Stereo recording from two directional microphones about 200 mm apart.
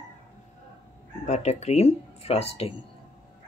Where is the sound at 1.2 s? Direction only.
35° left (ahead or behind).